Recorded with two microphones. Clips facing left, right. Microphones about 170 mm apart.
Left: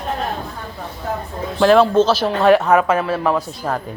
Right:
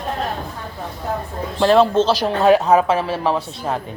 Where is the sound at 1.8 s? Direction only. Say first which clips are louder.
Left 1 dB; 30° right (ahead or behind).